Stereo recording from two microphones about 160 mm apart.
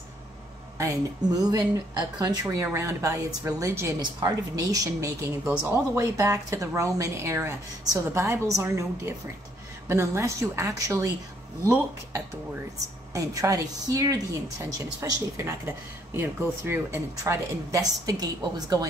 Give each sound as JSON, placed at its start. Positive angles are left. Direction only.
{"t": 0.7, "sound": "a woman's voice", "side_deg": -20}
{"t": 13.1, "sound": "speech", "side_deg": -20}